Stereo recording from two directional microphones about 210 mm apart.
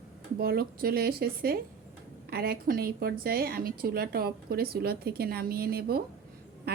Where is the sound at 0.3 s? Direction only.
45° right (ahead or behind).